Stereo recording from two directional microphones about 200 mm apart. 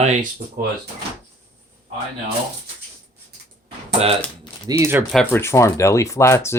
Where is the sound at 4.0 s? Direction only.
30° right (ahead or behind).